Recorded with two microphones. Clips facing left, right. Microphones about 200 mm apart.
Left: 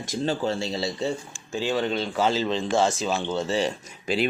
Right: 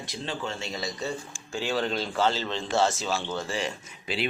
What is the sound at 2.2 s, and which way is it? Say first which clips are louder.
Speech: left 5 dB; 15° left (ahead or behind).